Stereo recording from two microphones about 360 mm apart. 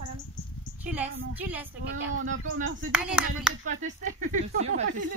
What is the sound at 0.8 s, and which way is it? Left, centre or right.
Speech, centre.